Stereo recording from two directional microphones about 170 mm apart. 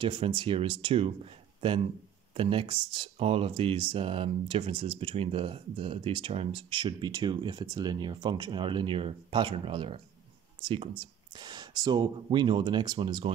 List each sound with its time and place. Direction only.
0.0 s speech: 30° right (ahead or behind)